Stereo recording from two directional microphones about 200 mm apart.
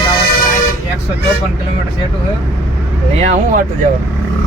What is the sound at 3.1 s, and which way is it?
Speech, 35° right (ahead or behind).